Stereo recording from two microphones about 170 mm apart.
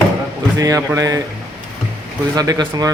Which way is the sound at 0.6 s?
15° right (ahead or behind).